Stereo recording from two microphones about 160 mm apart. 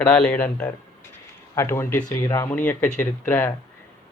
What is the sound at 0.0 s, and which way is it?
Speech, 5° left (ahead or behind).